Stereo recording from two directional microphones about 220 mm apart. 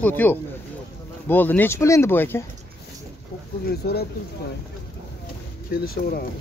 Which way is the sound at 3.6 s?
45° left (ahead or behind).